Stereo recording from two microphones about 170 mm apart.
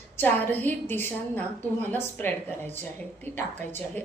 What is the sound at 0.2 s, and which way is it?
A woman's voice, 10° left (ahead or behind).